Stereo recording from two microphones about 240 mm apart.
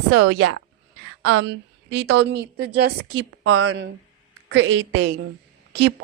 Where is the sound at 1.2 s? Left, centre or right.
Right.